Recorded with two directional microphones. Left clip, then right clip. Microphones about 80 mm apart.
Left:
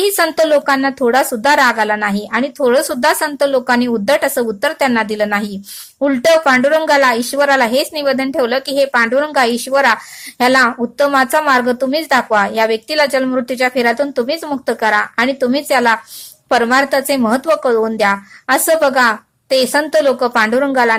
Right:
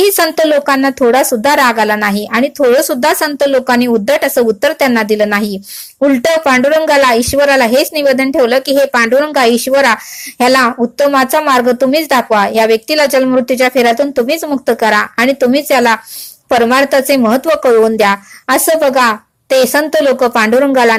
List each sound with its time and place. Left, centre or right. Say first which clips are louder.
0.3 s a woman's voice: right 2 dB; right
6.3 s a woman's voice: right 1 dB; centre